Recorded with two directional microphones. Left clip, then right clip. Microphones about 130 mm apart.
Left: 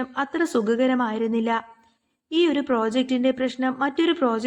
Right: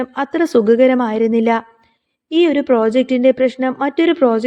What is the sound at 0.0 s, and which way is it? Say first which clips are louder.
A woman's voice: right 7 dB; 40° right (ahead or behind).